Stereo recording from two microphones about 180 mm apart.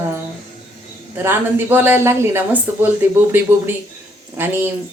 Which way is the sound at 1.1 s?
10° right (ahead or behind).